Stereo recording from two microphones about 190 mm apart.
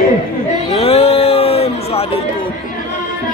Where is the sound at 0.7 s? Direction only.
30° left (ahead or behind).